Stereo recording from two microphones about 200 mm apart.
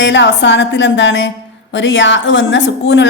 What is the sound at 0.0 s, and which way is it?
A woman's voice, 65° left (ahead or behind).